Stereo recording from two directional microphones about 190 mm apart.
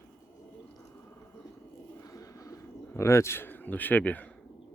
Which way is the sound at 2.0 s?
20° left (ahead or behind).